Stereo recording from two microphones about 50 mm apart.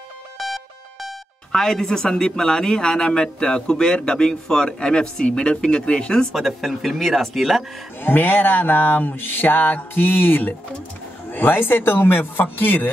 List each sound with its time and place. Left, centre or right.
1.5 s speech: centre
6.3 s speech: centre
8.0 s mantra: left